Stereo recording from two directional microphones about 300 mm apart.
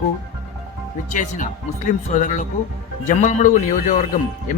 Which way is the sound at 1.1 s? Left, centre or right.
Left.